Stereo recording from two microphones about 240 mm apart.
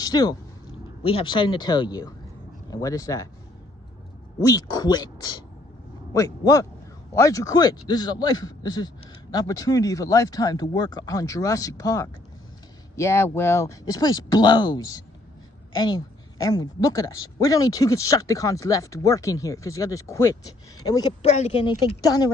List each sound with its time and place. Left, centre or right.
0.0 s a woman's voice: centre
4.4 s a woman's voice: centre
21.2 s a woman's voice: left